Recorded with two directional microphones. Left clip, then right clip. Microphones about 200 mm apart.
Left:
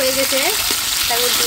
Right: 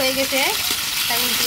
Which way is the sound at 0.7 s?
20° left (ahead or behind).